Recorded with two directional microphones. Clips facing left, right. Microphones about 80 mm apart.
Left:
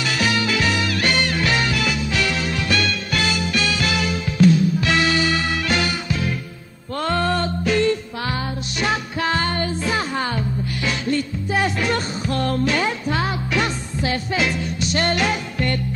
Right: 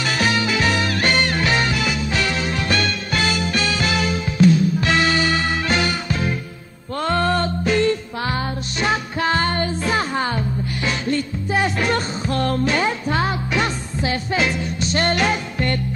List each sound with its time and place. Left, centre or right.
0.0 s music: right
0.4 s music: right
0.7 s music: right
1.4 s music: right
11.8 s music: right
12.6 s music: right